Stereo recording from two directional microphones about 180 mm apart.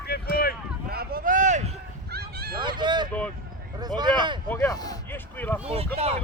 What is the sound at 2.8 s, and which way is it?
Speech, 25° right (ahead or behind).